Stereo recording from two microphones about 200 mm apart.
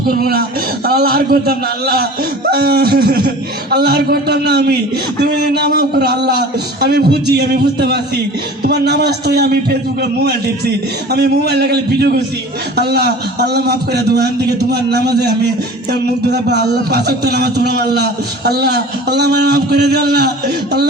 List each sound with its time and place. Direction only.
0.2 s a man's voice: 50° right (ahead or behind)